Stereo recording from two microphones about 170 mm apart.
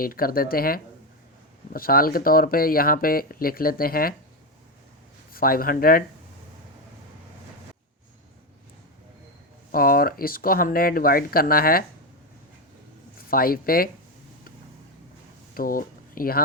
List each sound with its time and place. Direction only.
0.0 s speech: 60° left (ahead or behind)
5.3 s speech: 60° left (ahead or behind)
9.7 s speech: 60° left (ahead or behind)
13.1 s speech: 60° left (ahead or behind)
15.5 s speech: 55° left (ahead or behind)